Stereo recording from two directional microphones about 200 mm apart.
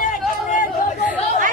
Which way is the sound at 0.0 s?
40° left (ahead or behind).